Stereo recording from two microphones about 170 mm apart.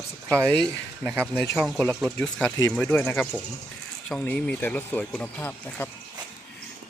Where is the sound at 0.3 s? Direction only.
15° right (ahead or behind); by 5.9 s 10° left (ahead or behind).